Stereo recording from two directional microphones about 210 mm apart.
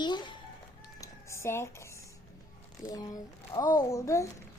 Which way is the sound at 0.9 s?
15° left (ahead or behind).